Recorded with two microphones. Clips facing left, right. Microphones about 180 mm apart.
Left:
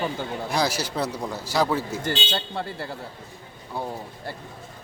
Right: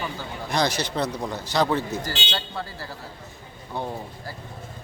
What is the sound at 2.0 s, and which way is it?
Speech, 25° left (ahead or behind).